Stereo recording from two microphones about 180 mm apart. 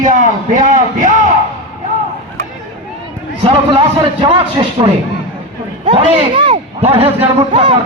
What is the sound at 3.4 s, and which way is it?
Speech, 25° right (ahead or behind).